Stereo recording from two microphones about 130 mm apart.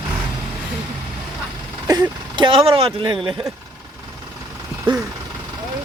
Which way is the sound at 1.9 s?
35° right (ahead or behind).